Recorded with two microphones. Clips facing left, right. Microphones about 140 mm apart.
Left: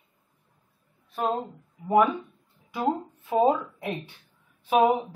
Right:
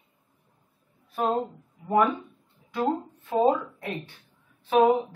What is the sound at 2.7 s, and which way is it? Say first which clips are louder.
Speech: even; 10° left (ahead or behind).